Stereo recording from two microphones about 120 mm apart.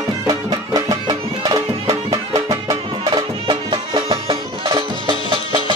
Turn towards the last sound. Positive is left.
turn(degrees=-40)  # may be behind; listen again after turning